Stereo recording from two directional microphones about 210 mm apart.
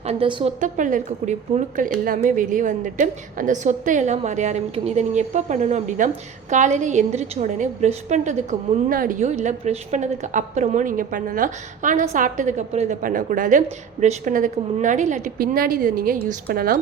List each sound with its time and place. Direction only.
0.0 s a woman's voice: 30° right (ahead or behind)
0.6 s a woman's voice: 35° right (ahead or behind)